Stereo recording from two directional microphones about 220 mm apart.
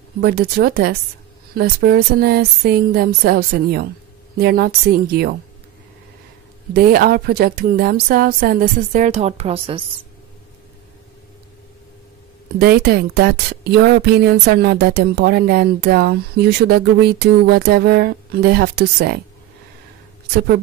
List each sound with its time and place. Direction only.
0.2 s speech: 45° right (ahead or behind)
6.7 s a woman's voice: 45° right (ahead or behind); by 9.8 s 25° right (ahead or behind)
12.5 s speech: 45° right (ahead or behind)
20.3 s speech: 45° right (ahead or behind)